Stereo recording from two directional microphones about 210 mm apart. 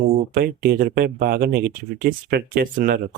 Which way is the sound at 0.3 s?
45° right (ahead or behind).